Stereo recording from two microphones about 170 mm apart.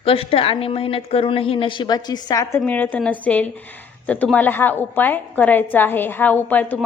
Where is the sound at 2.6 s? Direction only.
10° left (ahead or behind).